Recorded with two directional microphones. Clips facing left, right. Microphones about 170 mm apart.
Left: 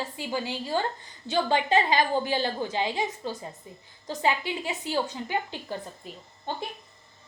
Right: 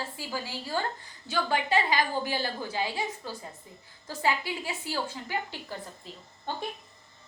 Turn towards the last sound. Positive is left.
turn(degrees=15)  # may be behind; listen again after turning